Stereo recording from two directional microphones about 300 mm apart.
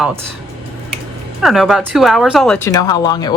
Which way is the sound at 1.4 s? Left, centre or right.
Centre.